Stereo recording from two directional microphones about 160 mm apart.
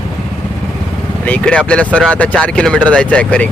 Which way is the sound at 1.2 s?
10° left (ahead or behind).